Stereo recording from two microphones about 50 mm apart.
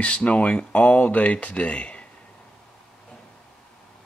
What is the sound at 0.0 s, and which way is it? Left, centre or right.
Speech, left.